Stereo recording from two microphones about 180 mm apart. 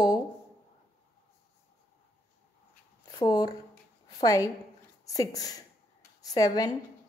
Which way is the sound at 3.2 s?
20° left (ahead or behind).